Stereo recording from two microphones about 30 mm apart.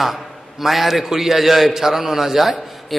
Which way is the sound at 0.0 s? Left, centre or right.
Centre.